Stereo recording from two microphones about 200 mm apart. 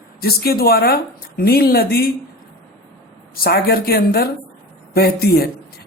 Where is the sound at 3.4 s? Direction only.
50° left (ahead or behind).